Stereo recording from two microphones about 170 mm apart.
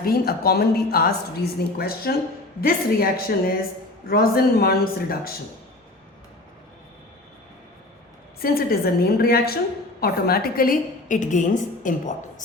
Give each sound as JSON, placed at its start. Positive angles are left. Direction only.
{"t": 0.0, "sound": "speech", "side_deg": 65}
{"t": 8.4, "sound": "a woman's voice", "side_deg": 60}